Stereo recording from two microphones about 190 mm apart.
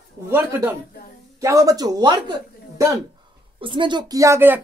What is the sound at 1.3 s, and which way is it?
A man's voice, 15° right (ahead or behind).